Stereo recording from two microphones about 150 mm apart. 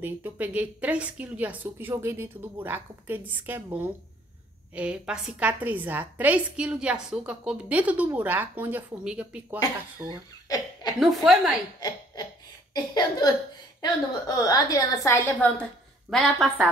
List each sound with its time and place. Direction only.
0.0 s a woman's voice: 10° right (ahead or behind)
10.5 s laughter: 25° left (ahead or behind)
11.0 s a woman's voice: centre (ahead or behind)
12.7 s a woman's voice: 30° left (ahead or behind)
16.1 s a woman's voice: centre (ahead or behind)